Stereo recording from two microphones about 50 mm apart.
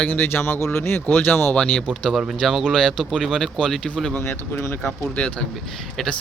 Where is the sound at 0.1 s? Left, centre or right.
Left.